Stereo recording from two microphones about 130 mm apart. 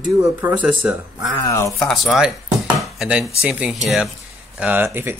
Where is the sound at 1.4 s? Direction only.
20° left (ahead or behind).